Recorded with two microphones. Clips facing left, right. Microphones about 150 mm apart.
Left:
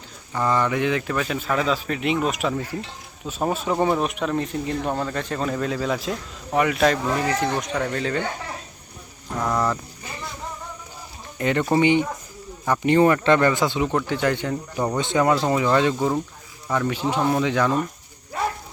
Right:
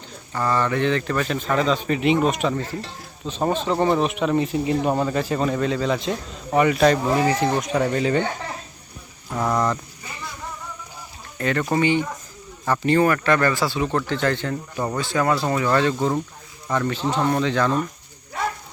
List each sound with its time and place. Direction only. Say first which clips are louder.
0.3 s speech: even; 15° left (ahead or behind); by 8.2 s 10° right (ahead or behind)
9.4 s speech: right 1 dB; centre (ahead or behind)
11.3 s speech: left 2 dB; 20° left (ahead or behind)